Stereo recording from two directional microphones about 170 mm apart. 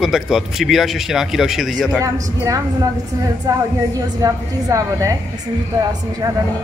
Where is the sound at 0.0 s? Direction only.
Centre (ahead or behind).